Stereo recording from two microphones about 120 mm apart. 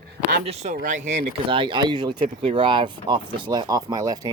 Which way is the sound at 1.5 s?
45° right (ahead or behind).